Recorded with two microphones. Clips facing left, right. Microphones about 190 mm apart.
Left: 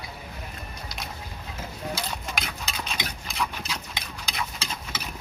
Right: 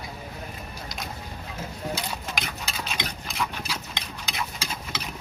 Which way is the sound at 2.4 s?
Centre (ahead or behind).